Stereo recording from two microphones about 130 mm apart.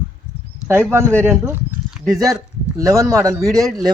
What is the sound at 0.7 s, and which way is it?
Speech, 15° right (ahead or behind).